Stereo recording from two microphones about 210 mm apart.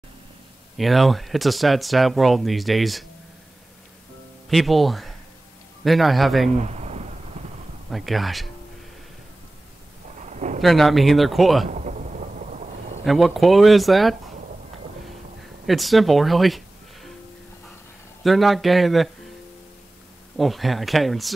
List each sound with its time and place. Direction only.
0.7 s speech: centre (ahead or behind)
4.5 s speech: centre (ahead or behind)
6.5 s a sound: 30° right (ahead or behind)
7.9 s speech: centre (ahead or behind)
10.2 s a sound: 35° right (ahead or behind)
10.6 s speech: centre (ahead or behind)
11.6 s thunder: 35° right (ahead or behind)
13.0 s speech: centre (ahead or behind)
15.6 s speech: centre (ahead or behind)
18.2 s speech: centre (ahead or behind)
20.3 s speech: centre (ahead or behind)